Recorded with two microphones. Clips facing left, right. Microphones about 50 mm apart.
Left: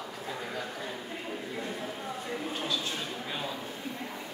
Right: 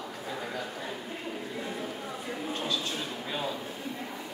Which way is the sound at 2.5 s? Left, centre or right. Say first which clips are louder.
Right 3 dB; centre.